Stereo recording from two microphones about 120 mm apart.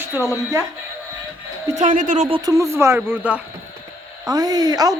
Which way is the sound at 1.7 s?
90° right.